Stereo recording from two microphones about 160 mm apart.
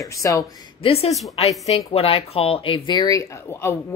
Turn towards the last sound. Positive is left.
turn(degrees=20)  # may be behind; listen again after turning